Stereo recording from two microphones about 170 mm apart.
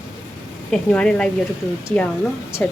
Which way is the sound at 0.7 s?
5° left (ahead or behind).